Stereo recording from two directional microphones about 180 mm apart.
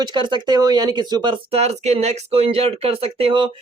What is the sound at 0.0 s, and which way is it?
Speech, 25° right (ahead or behind).